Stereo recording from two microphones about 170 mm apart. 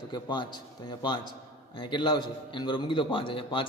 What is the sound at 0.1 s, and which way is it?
A man's voice, 25° left (ahead or behind).